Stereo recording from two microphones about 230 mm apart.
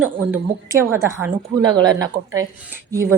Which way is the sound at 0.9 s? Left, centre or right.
Centre.